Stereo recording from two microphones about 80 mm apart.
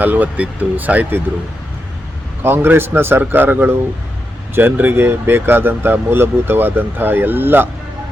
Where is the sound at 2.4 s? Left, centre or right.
Right.